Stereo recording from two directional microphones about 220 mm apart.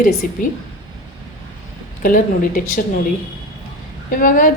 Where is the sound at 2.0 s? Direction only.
40° left (ahead or behind).